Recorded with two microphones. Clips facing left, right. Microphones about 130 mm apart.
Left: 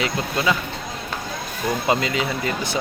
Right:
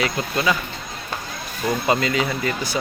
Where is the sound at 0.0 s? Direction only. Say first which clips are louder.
Even; 20° left (ahead or behind).